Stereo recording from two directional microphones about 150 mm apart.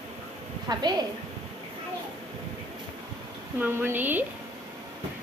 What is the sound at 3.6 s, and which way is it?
Speech, 15° right (ahead or behind).